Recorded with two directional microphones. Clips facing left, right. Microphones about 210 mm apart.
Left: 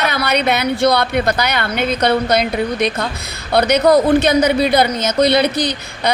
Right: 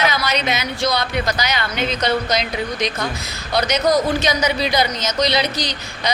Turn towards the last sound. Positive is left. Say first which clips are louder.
# left 6 dB
turn(degrees=55)  # may be behind; listen again after turning